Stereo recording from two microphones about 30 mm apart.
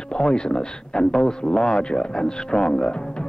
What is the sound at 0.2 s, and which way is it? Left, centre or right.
A man's voice, left.